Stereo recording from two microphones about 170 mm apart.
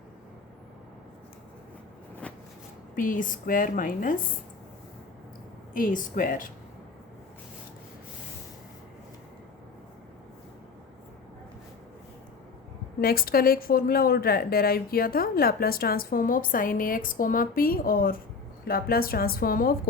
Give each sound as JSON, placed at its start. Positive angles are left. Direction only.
{"t": 2.2, "sound": "a sound", "side_deg": 5}
{"t": 2.9, "sound": "a woman's voice", "side_deg": 50}
{"t": 5.7, "sound": "a woman's voice", "side_deg": 55}
{"t": 13.0, "sound": "a woman's voice", "side_deg": 60}